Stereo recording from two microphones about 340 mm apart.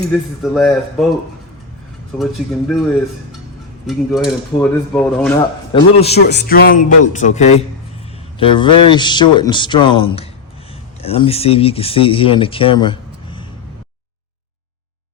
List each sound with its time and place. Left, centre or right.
0.1 s speech: centre
2.1 s speech: centre
3.8 s speech: centre
5.7 s speech: centre
6.1 s speech: left; by 13.5 s centre